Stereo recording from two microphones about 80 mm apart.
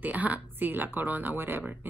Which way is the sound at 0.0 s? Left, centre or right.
Centre.